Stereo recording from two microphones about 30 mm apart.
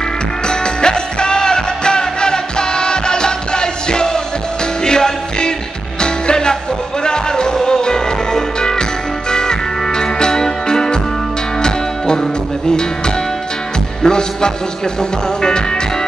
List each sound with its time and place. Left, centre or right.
0.5 s music: left